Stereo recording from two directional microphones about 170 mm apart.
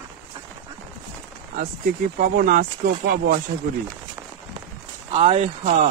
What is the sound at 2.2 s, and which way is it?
Speech, 55° right (ahead or behind).